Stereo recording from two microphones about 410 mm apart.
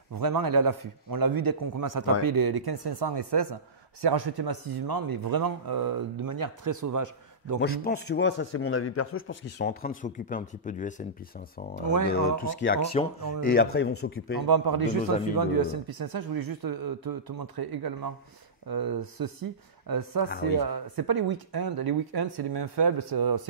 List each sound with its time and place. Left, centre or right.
0.1 s a man's voice: right
7.6 s a man's voice: left
11.7 s a man's voice: right
12.1 s a man's voice: left
14.4 s a man's voice: right
20.2 s a man's voice: left
20.5 s speech: right